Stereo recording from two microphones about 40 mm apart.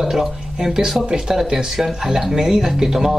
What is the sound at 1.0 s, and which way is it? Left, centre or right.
Speech, centre.